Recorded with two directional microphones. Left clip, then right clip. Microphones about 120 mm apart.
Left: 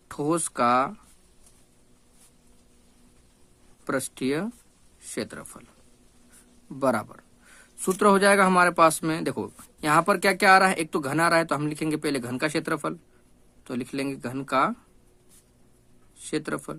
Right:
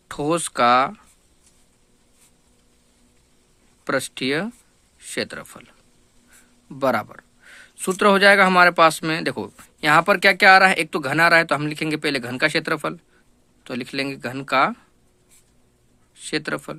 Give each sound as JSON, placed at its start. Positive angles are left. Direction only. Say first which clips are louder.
{"t": 0.1, "sound": "speech", "louder": "right 4 dB", "side_deg": -20}
{"t": 3.8, "sound": "speech", "louder": "right 5 dB", "side_deg": -20}
{"t": 6.7, "sound": "a sound", "louder": "right 4 dB", "side_deg": -15}
{"t": 7.9, "sound": "speech", "louder": "right 5 dB", "side_deg": -15}
{"t": 16.1, "sound": "speech", "louder": "right 4 dB", "side_deg": -20}